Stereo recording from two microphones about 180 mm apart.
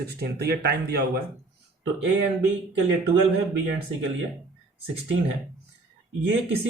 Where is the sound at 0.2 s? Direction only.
60° right (ahead or behind).